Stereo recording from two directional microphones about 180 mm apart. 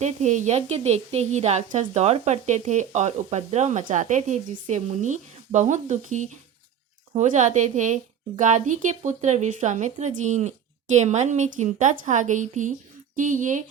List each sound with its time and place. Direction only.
0.0 s speech: 40° right (ahead or behind)